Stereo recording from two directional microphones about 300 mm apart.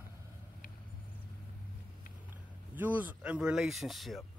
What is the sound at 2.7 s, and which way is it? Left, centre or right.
Speech, centre.